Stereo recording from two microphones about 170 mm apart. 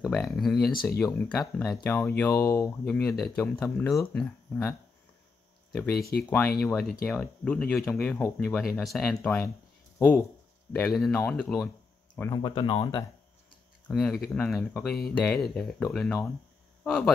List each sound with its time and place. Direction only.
0.0 s speech: 5° left (ahead or behind)
0.6 s speech: 60° left (ahead or behind)
0.9 s speech: 10° left (ahead or behind)
2.8 s speech: 5° left (ahead or behind)
5.9 s speech: 65° left (ahead or behind)
6.6 s speech: 5° left (ahead or behind)
12.2 s speech: 25° left (ahead or behind)
13.8 s speech: 5° left (ahead or behind)